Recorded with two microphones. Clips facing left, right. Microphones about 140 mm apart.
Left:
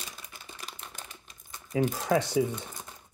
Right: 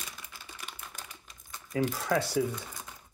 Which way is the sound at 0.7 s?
35° left (ahead or behind).